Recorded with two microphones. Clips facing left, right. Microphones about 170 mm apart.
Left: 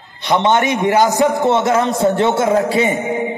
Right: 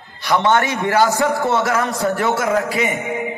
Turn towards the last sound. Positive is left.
turn(degrees=30)  # may be behind; listen again after turning